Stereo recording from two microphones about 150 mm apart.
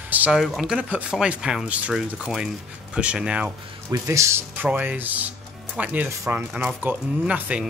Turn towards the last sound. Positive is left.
turn(degrees=-10)  # may be behind; listen again after turning